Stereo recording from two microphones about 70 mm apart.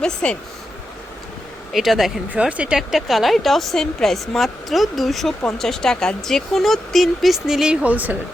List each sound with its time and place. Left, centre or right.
0.0 s speech: centre
1.7 s speech: centre
2.3 s speech: centre
2.7 s speech: centre; by 8.1 s right